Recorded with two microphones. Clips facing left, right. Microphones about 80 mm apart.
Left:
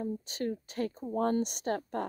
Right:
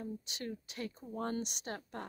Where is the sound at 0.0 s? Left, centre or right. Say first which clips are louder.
Left 8 dB; left.